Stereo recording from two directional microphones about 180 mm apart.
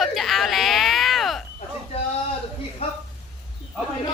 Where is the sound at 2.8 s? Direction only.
35° left (ahead or behind).